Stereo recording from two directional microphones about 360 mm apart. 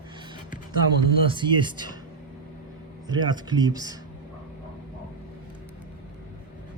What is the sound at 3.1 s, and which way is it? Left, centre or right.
Speech, centre.